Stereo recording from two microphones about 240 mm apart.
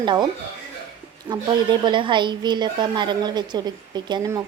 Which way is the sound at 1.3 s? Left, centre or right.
Centre.